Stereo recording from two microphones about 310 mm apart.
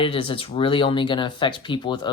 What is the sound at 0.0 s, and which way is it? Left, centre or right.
Speech, centre.